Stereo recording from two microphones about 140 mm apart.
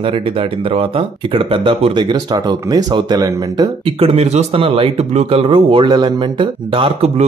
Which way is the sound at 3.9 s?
45° right (ahead or behind).